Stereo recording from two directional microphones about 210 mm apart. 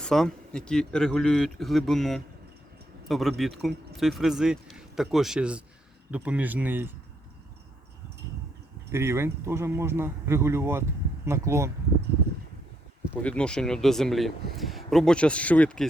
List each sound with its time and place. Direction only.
0.0 s a man's voice: 5° left (ahead or behind)
8.9 s speech: 10° right (ahead or behind)
13.2 s a man's voice: 5° left (ahead or behind)